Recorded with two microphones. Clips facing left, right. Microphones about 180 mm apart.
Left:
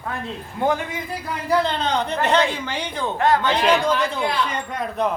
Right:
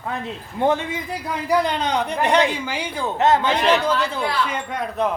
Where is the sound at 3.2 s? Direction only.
20° right (ahead or behind).